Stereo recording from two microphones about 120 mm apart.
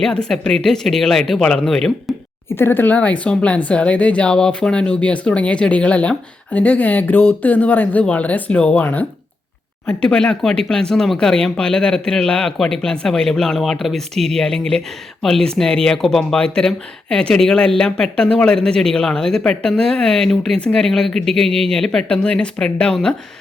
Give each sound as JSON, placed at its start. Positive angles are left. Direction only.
{"t": 0.0, "sound": "speech", "side_deg": 5}
{"t": 2.6, "sound": "speech", "side_deg": 15}